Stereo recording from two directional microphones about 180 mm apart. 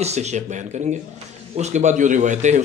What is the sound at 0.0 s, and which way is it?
A man's voice, 40° right (ahead or behind).